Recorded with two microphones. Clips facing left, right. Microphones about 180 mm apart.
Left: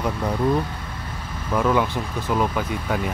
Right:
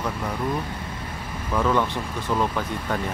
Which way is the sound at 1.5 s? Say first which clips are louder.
Left 2 dB; 5° left (ahead or behind).